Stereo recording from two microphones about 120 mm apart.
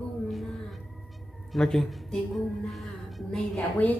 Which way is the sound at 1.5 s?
Centre (ahead or behind).